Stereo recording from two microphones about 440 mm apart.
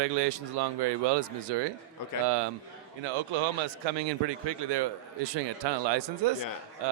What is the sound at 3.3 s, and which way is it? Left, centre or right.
A man's voice, right.